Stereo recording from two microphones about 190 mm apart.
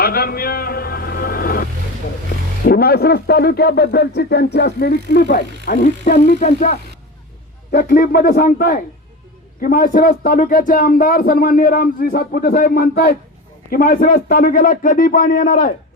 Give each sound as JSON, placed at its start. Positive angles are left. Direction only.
{"t": 0.0, "sound": "a sound", "side_deg": 55}
{"t": 2.6, "sound": "speech", "side_deg": 55}
{"t": 7.7, "sound": "speech", "side_deg": 55}